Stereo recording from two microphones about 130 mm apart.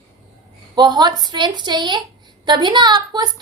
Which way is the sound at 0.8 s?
35° right (ahead or behind).